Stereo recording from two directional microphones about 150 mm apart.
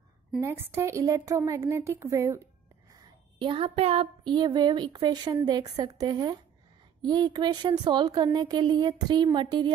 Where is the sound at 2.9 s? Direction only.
35° right (ahead or behind).